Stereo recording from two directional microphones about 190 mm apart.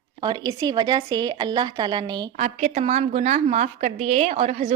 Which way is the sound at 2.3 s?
40° right (ahead or behind).